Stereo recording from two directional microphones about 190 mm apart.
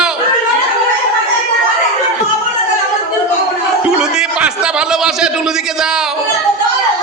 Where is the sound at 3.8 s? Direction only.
5° right (ahead or behind).